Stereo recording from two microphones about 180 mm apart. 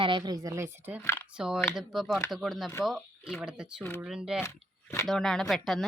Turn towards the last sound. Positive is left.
turn(degrees=0)  # may be behind; listen again after turning